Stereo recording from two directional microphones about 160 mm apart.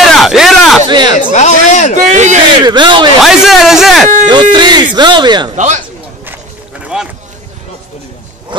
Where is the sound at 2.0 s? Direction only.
50° right (ahead or behind).